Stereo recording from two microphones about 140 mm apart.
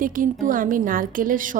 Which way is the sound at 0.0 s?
75° right (ahead or behind).